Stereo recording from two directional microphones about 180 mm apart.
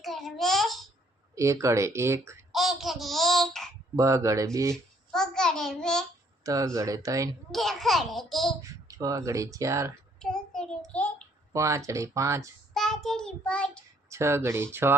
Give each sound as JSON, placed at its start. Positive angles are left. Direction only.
{"t": 0.0, "sound": "a sound", "side_deg": 0}
{"t": 1.4, "sound": "speech", "side_deg": -15}
{"t": 2.5, "sound": "child singing", "side_deg": 0}
{"t": 3.9, "sound": "speech", "side_deg": -15}
{"t": 5.1, "sound": "child singing", "side_deg": 5}
{"t": 6.4, "sound": "speech", "side_deg": -20}
{"t": 7.5, "sound": "a child's voice", "side_deg": 0}
{"t": 8.9, "sound": "speech", "side_deg": -20}
{"t": 10.2, "sound": "child singing", "side_deg": 5}
{"t": 11.5, "sound": "speech", "side_deg": -15}
{"t": 12.7, "sound": "child singing", "side_deg": 0}
{"t": 14.1, "sound": "speech", "side_deg": -15}